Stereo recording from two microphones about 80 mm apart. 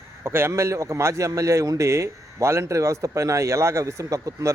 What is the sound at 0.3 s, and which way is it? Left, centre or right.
A man's voice, right.